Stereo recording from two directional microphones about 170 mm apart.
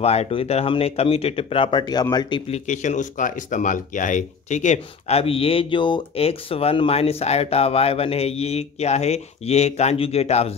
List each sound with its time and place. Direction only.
0.0 s speech: 40° left (ahead or behind)
2.7 s speech: 45° left (ahead or behind)